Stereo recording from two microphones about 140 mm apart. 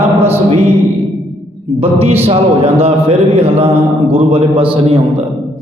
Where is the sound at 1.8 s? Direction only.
45° right (ahead or behind).